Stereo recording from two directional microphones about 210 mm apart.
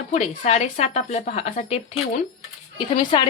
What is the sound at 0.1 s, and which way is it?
Speech, 35° left (ahead or behind).